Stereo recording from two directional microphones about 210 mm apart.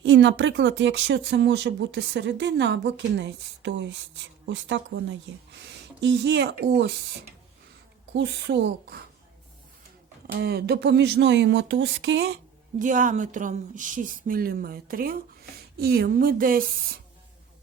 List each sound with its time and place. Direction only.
0.0 s speech: 60° right (ahead or behind)
8.1 s speech: 55° right (ahead or behind)
10.3 s speech: 50° right (ahead or behind)
12.8 s speech: 40° right (ahead or behind)